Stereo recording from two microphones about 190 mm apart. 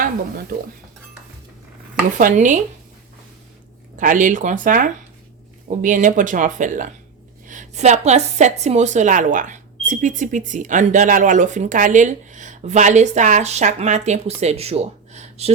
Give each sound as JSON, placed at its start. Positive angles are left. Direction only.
{"t": 2.1, "sound": "speech", "side_deg": -45}
{"t": 3.9, "sound": "a woman's voice", "side_deg": -45}